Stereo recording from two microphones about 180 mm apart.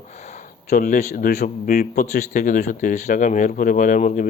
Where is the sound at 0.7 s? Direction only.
45° left (ahead or behind).